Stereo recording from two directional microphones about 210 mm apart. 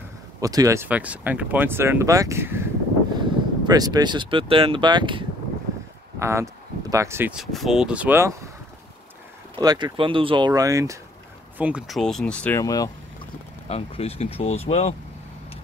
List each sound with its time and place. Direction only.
0.4 s speech: 15° right (ahead or behind)
9.6 s speech: 20° right (ahead or behind); by 12.9 s 15° left (ahead or behind)
13.7 s speech: 30° left (ahead or behind)